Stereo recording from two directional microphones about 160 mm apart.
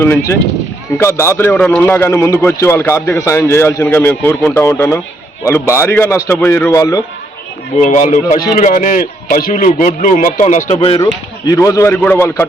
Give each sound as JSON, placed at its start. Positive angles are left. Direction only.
{"t": 0.0, "sound": "a man's voice", "side_deg": 15}
{"t": 7.8, "sound": "a man's voice", "side_deg": 50}
{"t": 10.8, "sound": "speech", "side_deg": 30}
{"t": 11.4, "sound": "a man's voice", "side_deg": 20}